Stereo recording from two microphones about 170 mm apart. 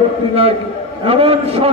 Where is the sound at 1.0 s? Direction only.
35° right (ahead or behind).